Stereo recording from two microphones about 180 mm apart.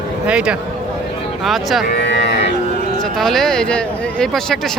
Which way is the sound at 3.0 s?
Centre (ahead or behind).